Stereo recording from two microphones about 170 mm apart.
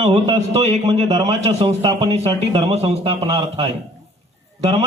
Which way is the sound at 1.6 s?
25° right (ahead or behind).